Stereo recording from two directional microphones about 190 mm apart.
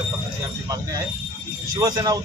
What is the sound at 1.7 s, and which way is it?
Speech, 20° right (ahead or behind).